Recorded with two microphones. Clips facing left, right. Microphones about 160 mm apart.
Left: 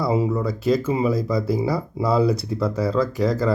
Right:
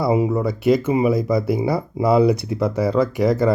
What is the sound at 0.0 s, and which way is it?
A man's voice, 15° right (ahead or behind).